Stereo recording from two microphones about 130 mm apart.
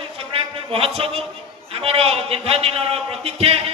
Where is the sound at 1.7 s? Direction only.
50° right (ahead or behind).